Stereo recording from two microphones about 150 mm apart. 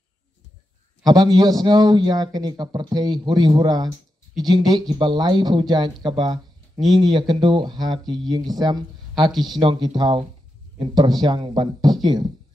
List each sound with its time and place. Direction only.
1.0 s a man's voice: 25° right (ahead or behind)
9.1 s speech: centre (ahead or behind)
9.6 s a man's voice: 30° right (ahead or behind)